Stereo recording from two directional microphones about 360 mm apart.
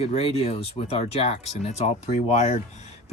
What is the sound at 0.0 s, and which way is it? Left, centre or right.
Speech, centre.